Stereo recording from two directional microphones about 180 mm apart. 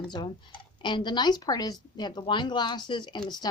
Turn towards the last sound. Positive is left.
turn(degrees=25)  # may be behind; listen again after turning